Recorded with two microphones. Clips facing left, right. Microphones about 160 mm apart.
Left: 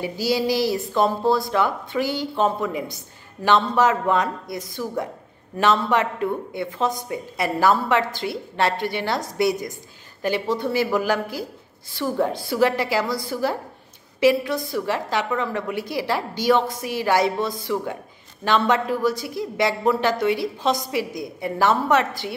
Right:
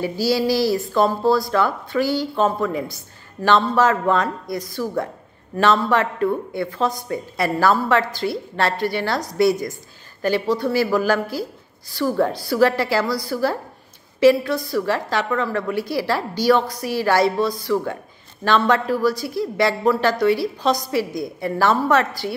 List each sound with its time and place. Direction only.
0.0 s a woman's voice: 20° left (ahead or behind)